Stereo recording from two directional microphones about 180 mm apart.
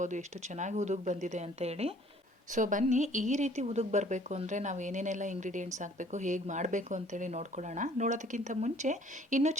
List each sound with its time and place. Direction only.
0.0 s speech: 40° right (ahead or behind)